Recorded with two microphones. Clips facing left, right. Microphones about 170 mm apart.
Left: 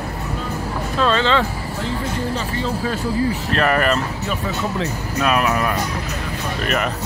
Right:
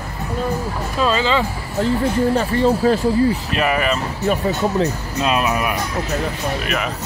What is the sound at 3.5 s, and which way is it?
Speech, 5° right (ahead or behind).